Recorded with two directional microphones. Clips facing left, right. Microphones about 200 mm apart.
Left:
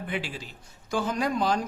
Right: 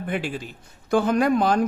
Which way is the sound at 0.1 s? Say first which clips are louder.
Right 7 dB; 50° right (ahead or behind).